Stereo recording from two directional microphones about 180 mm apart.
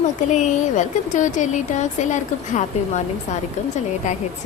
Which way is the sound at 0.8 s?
45° left (ahead or behind).